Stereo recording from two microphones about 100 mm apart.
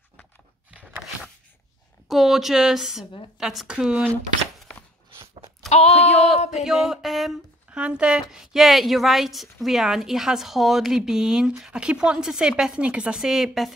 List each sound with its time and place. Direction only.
0.7 s a sound: 10° right (ahead or behind)
2.0 s a woman's voice: centre (ahead or behind)
4.7 s chopping: 10° left (ahead or behind)
5.8 s speech: 90° left
6.5 s a woman's voice: 5° right (ahead or behind)